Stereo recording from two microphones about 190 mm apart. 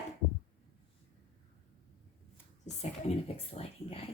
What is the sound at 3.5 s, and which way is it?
Speech, 30° left (ahead or behind).